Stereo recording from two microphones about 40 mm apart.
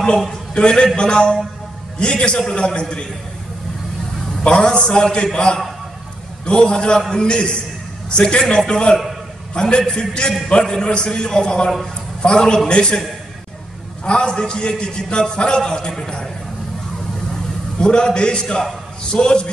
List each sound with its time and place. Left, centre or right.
0.6 s a man's voice: left
4.5 s a man's voice: left
14.0 s a man's voice: left
17.7 s a man's voice: left